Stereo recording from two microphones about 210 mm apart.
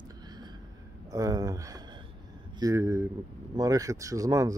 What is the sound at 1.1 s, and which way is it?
Speech, 15° right (ahead or behind).